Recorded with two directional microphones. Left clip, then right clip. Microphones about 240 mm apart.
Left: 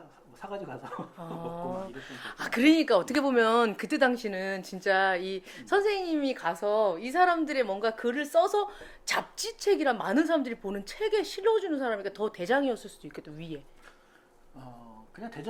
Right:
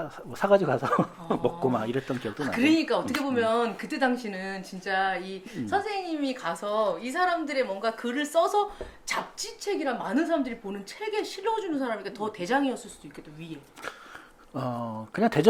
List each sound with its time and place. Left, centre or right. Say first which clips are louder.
0.3 s speech: right 17 dB; right
2.2 s speech: left 2 dB; left
14.5 s speech: right 17 dB; right